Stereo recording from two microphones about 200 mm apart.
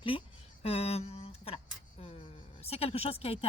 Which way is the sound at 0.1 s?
25° left (ahead or behind).